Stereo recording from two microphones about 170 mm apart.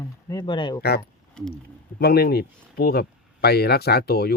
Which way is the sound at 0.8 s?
70° left (ahead or behind).